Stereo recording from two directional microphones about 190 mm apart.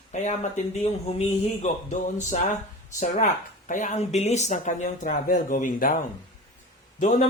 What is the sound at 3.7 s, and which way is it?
Speech, 40° left (ahead or behind).